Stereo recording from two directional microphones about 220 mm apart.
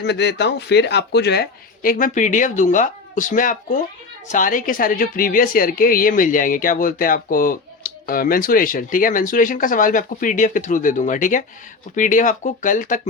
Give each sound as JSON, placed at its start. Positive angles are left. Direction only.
{"t": 0.0, "sound": "a woman's voice", "side_deg": 50}